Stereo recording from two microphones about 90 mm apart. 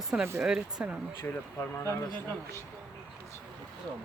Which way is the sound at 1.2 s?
30° left (ahead or behind).